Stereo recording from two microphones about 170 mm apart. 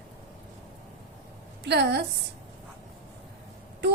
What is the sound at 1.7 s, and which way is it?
Speech, 80° right.